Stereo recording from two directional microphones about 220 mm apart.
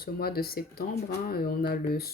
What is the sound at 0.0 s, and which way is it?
Speech, 45° left (ahead or behind).